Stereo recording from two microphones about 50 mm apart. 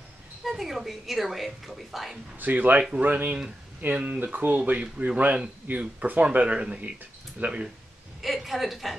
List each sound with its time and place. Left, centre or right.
0.5 s a woman's voice: centre
2.3 s speech: right
3.9 s speech: right
4.2 s speech: right
4.7 s speech: right
8.2 s a woman's voice: centre